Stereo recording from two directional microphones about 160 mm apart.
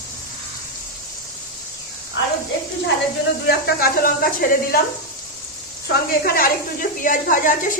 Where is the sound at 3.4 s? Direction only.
75° left (ahead or behind).